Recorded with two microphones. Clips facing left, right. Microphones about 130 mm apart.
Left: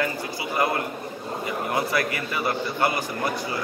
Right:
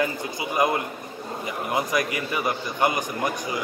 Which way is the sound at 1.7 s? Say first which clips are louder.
Right 2 dB; 15° right (ahead or behind).